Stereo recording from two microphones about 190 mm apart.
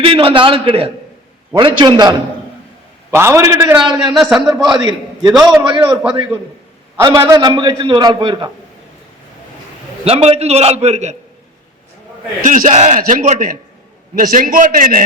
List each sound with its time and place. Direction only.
0.0 s a man's voice: 30° right (ahead or behind)
5.3 s a man's voice: centre (ahead or behind)
5.5 s a man's voice: 25° right (ahead or behind)
5.8 s a man's voice: 5° right (ahead or behind)
6.9 s a man's voice: 15° right (ahead or behind)
10.0 s a man's voice: 30° right (ahead or behind)
12.4 s a man's voice: 40° right (ahead or behind)